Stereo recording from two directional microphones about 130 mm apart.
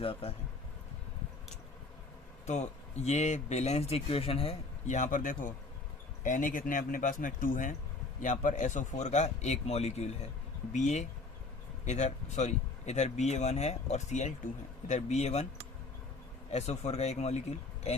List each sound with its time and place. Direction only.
0.0 s speech: 45° left (ahead or behind)
2.5 s speech: 60° left (ahead or behind)
4.9 s speech: 75° left (ahead or behind)
8.2 s speech: 75° left (ahead or behind); by 15.4 s 55° left (ahead or behind)
16.5 s speech: 55° left (ahead or behind)